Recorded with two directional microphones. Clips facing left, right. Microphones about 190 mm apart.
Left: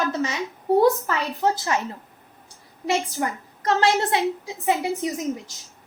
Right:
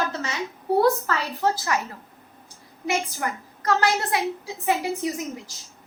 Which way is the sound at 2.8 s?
25° left (ahead or behind).